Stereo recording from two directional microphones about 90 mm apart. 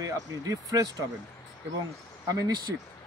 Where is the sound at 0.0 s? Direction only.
40° right (ahead or behind).